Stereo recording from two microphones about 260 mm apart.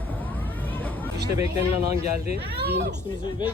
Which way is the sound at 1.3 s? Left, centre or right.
Centre.